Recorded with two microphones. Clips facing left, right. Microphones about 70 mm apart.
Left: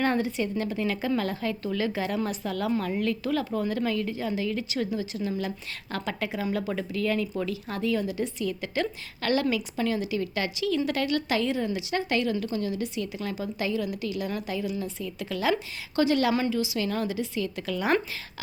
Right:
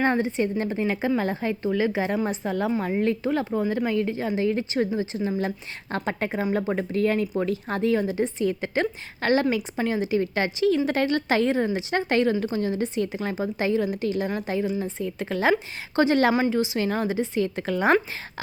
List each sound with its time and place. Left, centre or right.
0.0 s a woman's voice: right